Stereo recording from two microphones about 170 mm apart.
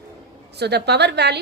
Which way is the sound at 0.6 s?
75° right (ahead or behind).